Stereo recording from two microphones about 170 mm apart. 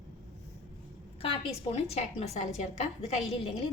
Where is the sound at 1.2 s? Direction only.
35° left (ahead or behind).